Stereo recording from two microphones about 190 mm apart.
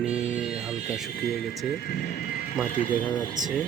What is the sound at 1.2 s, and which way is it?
Speech, 55° left (ahead or behind).